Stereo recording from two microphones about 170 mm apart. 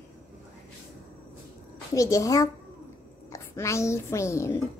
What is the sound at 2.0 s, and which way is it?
A woman's voice, 20° left (ahead or behind).